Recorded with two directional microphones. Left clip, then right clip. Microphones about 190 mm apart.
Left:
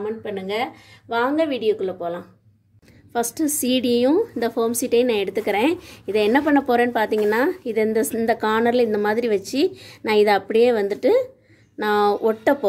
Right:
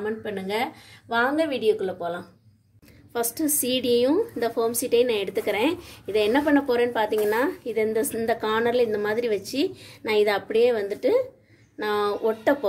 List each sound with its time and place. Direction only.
0.0 s speech: 15° left (ahead or behind)
3.1 s a woman's voice: 35° left (ahead or behind)